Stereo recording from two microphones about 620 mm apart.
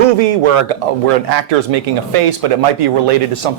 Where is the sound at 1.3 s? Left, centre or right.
Right.